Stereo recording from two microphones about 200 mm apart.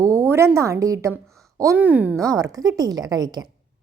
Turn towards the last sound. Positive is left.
turn(degrees=-20)  # may be behind; listen again after turning